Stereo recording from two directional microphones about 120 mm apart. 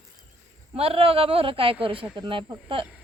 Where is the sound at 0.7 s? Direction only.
55° right (ahead or behind).